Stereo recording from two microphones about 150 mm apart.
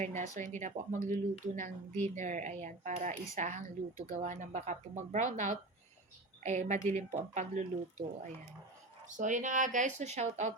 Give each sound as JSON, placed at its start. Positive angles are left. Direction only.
{"t": 0.2, "sound": "speech", "side_deg": -55}